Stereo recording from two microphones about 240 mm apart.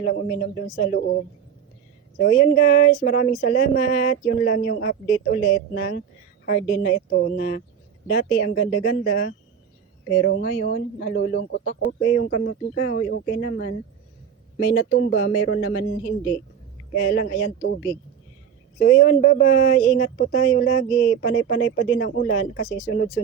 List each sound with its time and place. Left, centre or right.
0.0 s speech: left
2.1 s speech: left
16.9 s speech: left
18.8 s speech: left